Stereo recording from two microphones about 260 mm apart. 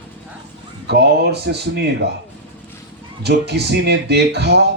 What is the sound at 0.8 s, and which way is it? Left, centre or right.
Speech, right.